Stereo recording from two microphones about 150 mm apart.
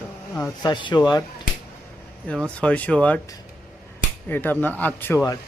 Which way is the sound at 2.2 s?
5° left (ahead or behind).